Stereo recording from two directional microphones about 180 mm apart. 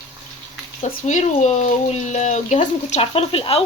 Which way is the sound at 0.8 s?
40° left (ahead or behind).